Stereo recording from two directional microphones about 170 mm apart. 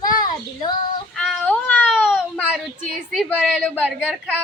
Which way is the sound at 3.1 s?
5° left (ahead or behind).